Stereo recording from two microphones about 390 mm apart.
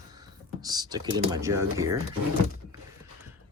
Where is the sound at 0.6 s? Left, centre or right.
Centre.